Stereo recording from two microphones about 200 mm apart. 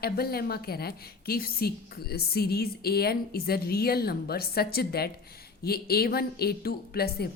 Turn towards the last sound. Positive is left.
turn(degrees=50)  # may be behind; listen again after turning